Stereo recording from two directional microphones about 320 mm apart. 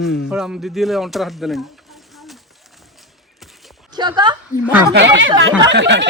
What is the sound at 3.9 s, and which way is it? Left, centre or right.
Speech, centre.